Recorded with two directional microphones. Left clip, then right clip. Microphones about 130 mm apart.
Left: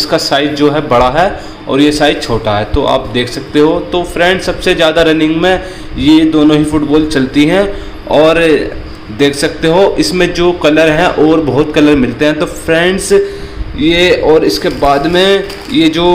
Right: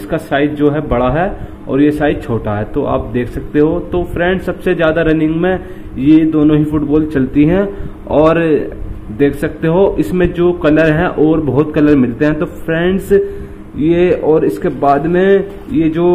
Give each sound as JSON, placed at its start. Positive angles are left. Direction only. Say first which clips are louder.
{"t": 0.1, "sound": "a man's voice", "louder": "left 1 dB", "side_deg": -5}